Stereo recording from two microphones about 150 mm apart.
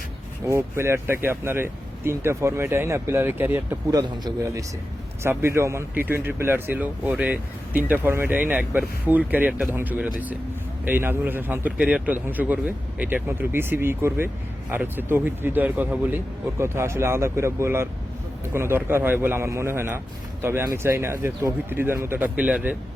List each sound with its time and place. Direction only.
0.4 s speech: 20° right (ahead or behind)
3.9 s a man's voice: 25° right (ahead or behind)